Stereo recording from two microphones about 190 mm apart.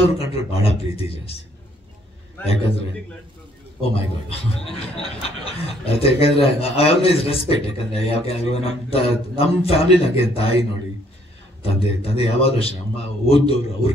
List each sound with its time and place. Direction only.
0.0 s a man's voice: 30° left (ahead or behind)
3.9 s a man's voice: 30° left (ahead or behind)
11.6 s a man's voice: 30° left (ahead or behind)